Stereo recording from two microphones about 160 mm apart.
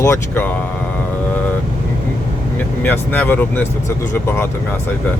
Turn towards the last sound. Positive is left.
turn(degrees=15)  # may be behind; listen again after turning